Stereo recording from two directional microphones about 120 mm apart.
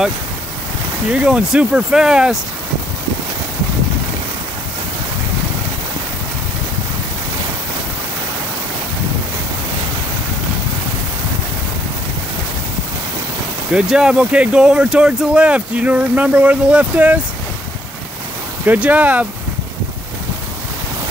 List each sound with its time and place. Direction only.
1.1 s speech: 5° right (ahead or behind)
13.7 s speech: 5° right (ahead or behind)
18.7 s speech: 15° right (ahead or behind)